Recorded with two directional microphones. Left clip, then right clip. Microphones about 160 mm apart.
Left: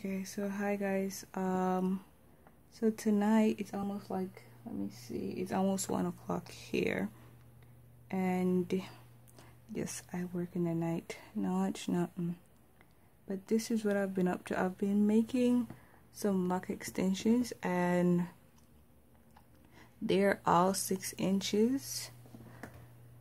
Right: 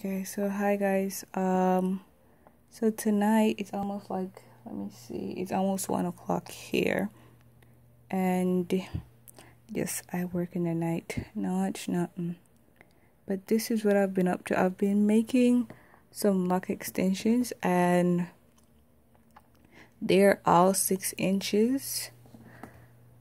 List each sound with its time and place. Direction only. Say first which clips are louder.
0.0 s speech: right 7 dB; 25° right (ahead or behind)
1.8 s speech: right 6 dB; 10° right (ahead or behind)
2.7 s speech: right 4 dB; 25° right (ahead or behind)
8.1 s speech: right 5 dB; 25° right (ahead or behind)
13.3 s speech: right 5 dB; 25° right (ahead or behind)
18.0 s speech: right 4 dB; 15° right (ahead or behind)
19.7 s speech: right 7 dB; 20° right (ahead or behind)